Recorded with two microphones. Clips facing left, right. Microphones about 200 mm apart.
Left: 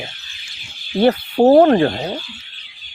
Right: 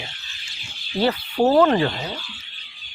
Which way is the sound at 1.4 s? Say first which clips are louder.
Left 6 dB; 45° left (ahead or behind).